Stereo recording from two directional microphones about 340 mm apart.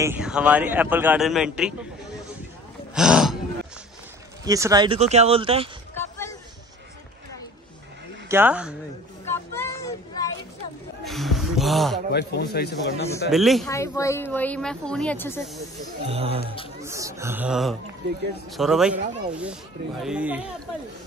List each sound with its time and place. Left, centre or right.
0.0 s speech: centre
2.9 s gasp: centre
4.5 s speech: centre
5.9 s a sound: centre
8.3 s speech: centre
9.3 s a sound: centre
11.1 s music: centre
12.1 s speech: left
13.3 s speech: centre
16.1 s speech: centre